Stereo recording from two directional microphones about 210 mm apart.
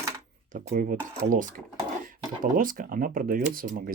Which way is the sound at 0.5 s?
40° right (ahead or behind).